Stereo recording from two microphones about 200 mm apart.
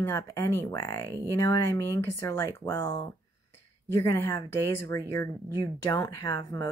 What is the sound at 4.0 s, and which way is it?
Speech, 15° left (ahead or behind).